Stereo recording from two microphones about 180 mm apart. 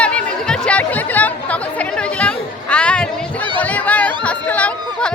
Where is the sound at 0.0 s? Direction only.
5° left (ahead or behind).